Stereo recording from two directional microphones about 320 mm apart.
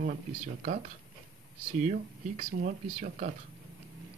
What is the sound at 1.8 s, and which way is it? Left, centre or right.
Speech, right.